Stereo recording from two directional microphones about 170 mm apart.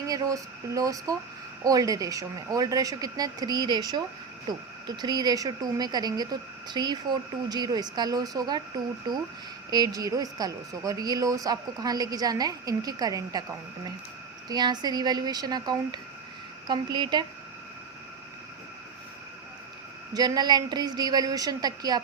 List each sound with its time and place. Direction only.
0.1 s a woman's voice: 20° right (ahead or behind)
20.1 s a woman's voice: 25° right (ahead or behind)